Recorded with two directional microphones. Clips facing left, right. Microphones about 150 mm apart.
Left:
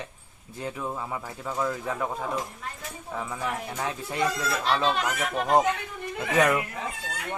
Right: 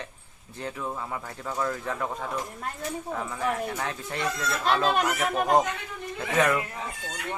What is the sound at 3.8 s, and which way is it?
Speech, 15° left (ahead or behind).